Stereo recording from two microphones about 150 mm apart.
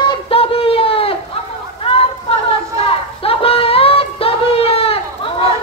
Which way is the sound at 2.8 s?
40° left (ahead or behind).